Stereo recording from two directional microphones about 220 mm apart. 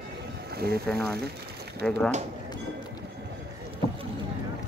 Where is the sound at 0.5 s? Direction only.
45° right (ahead or behind).